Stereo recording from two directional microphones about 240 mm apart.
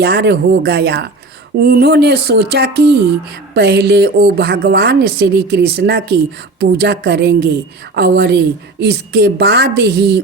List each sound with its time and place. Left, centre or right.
0.0 s a woman's voice: right